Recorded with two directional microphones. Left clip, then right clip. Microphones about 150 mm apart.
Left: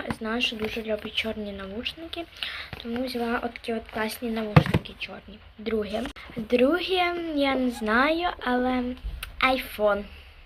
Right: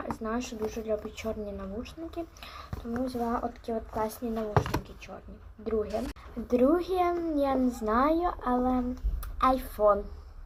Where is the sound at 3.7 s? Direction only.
25° left (ahead or behind).